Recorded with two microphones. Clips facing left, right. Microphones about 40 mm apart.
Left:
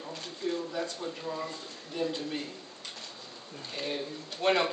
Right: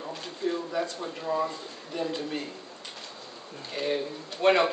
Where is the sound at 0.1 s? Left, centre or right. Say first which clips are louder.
Right 3 dB; centre.